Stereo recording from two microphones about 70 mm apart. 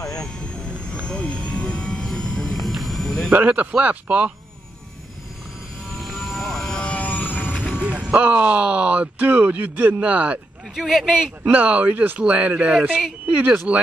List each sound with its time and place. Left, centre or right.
0.2 s vehicle: centre
3.3 s speech: right
6.0 s vehicle: centre
6.8 s vehicle: centre
7.5 s music: centre
7.8 s speech: centre
10.7 s speech: centre
11.5 s speech: right